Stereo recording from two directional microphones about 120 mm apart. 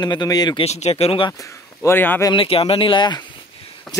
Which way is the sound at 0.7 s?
65° left (ahead or behind).